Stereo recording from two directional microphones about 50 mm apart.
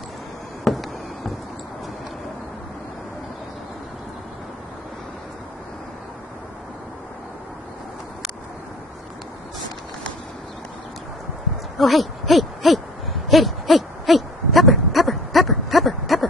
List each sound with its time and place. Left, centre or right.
0.7 s a sound: centre
11.8 s hoot: centre
13.3 s owl: centre